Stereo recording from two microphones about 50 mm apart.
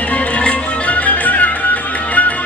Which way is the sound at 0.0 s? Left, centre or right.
Left.